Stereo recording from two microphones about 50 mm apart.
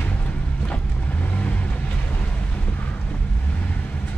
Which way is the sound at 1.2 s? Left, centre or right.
Left.